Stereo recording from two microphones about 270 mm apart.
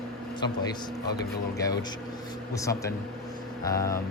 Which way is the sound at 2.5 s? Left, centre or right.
Centre.